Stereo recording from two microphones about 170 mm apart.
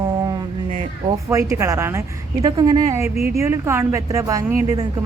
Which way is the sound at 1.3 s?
15° right (ahead or behind).